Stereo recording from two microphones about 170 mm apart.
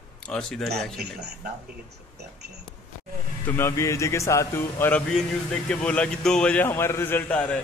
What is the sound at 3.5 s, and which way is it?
A man's voice, 15° left (ahead or behind).